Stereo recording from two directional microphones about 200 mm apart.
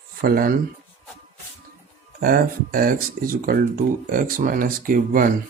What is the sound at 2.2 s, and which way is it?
Speech, 45° right (ahead or behind).